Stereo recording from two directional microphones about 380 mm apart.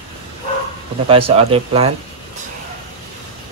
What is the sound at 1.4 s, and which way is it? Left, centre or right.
Speech, centre.